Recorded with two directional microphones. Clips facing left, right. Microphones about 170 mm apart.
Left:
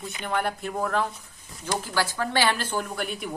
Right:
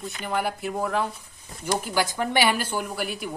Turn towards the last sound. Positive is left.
turn(degrees=0)  # may be behind; listen again after turning